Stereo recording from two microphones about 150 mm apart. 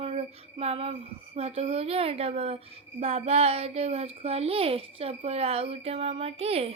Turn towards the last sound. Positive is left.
turn(degrees=-40)  # may be behind; listen again after turning